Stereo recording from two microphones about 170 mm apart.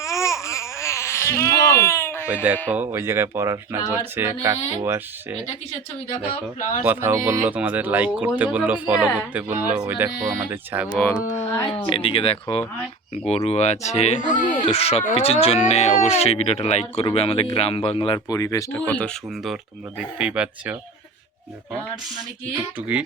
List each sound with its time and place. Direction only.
0.0 s baby cry: 15° left (ahead or behind)
2.2 s speech: 10° right (ahead or behind)
6.8 s speech: 10° right (ahead or behind)
10.9 s speech: 10° left (ahead or behind)
11.9 s speech: 30° left (ahead or behind)
18.3 s speech: 20° left (ahead or behind); by 20.7 s 5° right (ahead or behind)